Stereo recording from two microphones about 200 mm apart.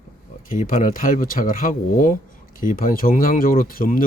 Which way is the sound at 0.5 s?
40° left (ahead or behind).